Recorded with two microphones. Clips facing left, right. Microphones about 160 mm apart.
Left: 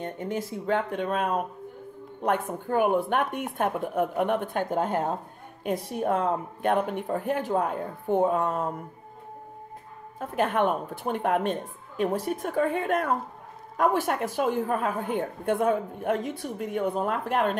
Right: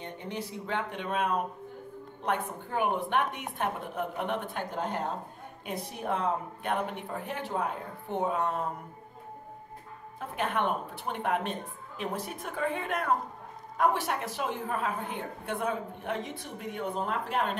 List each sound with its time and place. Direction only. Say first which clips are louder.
0.0 s a woman's voice: left 6 dB; 45° left (ahead or behind)
10.1 s a woman's voice: left 6 dB; 45° left (ahead or behind)